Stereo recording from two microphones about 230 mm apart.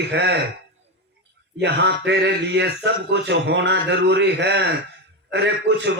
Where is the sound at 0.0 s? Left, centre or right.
Right.